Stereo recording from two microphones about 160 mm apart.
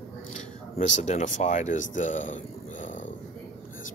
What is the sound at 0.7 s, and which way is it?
Speech, 45° left (ahead or behind).